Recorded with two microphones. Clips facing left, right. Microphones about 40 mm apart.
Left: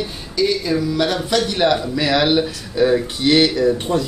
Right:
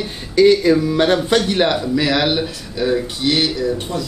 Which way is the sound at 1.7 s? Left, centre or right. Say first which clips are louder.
Even; centre.